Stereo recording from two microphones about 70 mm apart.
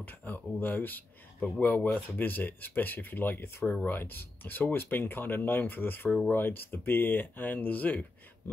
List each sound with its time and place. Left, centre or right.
0.0 s speech: left
6.0 s speech: centre
6.3 s speech: left